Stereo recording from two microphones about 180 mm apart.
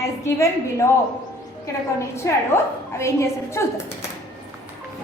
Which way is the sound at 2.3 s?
15° left (ahead or behind).